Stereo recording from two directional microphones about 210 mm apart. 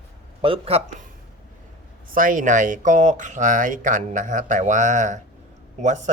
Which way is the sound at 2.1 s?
40° right (ahead or behind).